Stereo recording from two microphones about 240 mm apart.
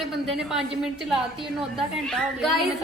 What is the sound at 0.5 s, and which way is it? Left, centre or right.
A woman's voice, centre.